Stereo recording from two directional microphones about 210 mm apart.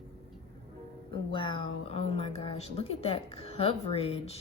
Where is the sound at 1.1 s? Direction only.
25° left (ahead or behind).